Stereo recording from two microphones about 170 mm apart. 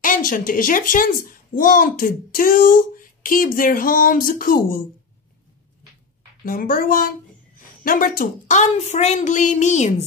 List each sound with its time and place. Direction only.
0.0 s a child's voice: 50° left (ahead or behind)
6.4 s a child's voice: 55° left (ahead or behind)